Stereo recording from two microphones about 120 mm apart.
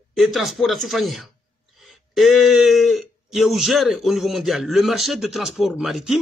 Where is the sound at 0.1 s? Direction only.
Centre (ahead or behind).